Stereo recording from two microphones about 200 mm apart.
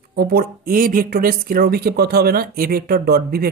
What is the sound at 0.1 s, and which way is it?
A woman's voice, 50° right (ahead or behind).